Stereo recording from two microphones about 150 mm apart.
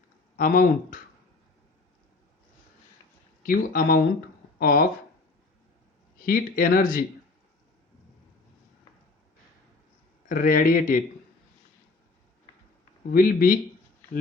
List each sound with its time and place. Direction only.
0.3 s speech: 65° left (ahead or behind)
3.4 s speech: 75° left (ahead or behind)
4.6 s speech: 90° left
6.2 s speech: 75° left (ahead or behind)
10.2 s speech: 65° left (ahead or behind)
13.1 s speech: 70° left (ahead or behind)